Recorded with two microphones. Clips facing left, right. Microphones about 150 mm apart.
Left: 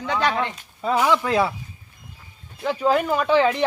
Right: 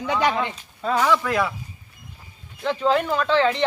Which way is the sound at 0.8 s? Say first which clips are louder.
Left 1 dB; 15° left (ahead or behind).